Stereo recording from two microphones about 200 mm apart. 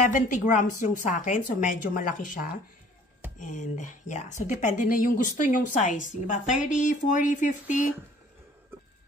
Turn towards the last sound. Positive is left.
turn(degrees=40)  # may be behind; listen again after turning